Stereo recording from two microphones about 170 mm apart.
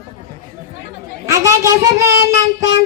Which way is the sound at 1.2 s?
20° right (ahead or behind).